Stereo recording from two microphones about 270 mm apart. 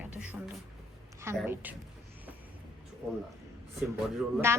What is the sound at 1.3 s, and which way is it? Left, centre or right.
Speech, centre.